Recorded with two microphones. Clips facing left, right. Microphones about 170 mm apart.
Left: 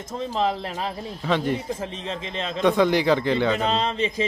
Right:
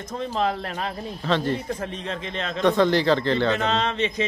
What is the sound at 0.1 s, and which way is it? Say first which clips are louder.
A man's voice: left 1 dB; centre (ahead or behind).